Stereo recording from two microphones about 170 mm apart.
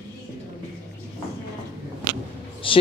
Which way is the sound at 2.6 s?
30° left (ahead or behind).